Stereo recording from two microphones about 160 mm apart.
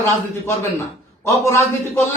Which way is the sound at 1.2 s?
15° left (ahead or behind).